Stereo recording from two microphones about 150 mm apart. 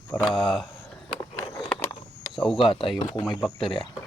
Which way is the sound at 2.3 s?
5° left (ahead or behind).